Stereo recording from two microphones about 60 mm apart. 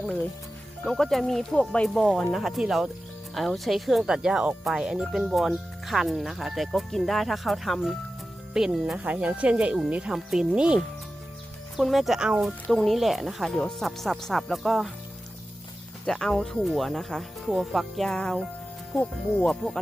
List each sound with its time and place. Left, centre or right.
0.0 s speech: centre
0.9 s speech: centre
1.9 s speech: centre
9.2 s speech: right
10.1 s speech: centre
10.5 s speech: centre
11.8 s speech: centre
12.7 s speech: centre
16.0 s speech: centre
18.1 s speech: centre
18.9 s speech: left